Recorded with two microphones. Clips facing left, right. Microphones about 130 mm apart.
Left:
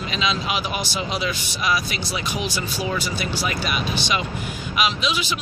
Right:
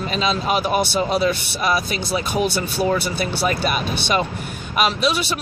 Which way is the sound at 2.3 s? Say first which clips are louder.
Right 9 dB; 55° right (ahead or behind).